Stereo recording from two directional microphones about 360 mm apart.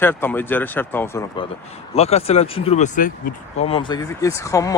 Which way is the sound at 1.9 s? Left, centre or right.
Centre.